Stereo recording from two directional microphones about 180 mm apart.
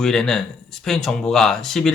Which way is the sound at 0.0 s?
Centre (ahead or behind).